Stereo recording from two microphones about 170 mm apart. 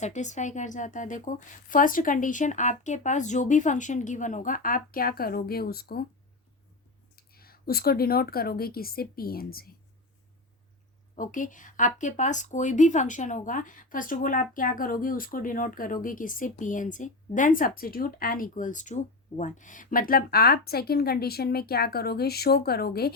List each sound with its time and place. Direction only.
0.0 s a woman's voice: 45° left (ahead or behind); by 6.1 s 65° left (ahead or behind)
7.2 s speech: 60° left (ahead or behind)
11.2 s a woman's voice: 50° left (ahead or behind); by 23.1 s 65° left (ahead or behind)